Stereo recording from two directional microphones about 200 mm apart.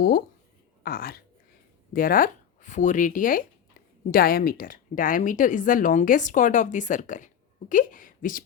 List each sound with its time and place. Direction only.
0.8 s speech: 45° left (ahead or behind)